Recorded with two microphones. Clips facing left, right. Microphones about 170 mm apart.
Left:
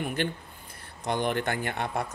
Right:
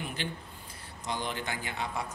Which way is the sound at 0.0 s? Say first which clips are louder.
Left 7 dB; 55° left (ahead or behind).